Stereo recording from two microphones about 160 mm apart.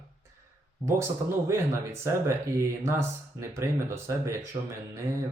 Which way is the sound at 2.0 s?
15° right (ahead or behind).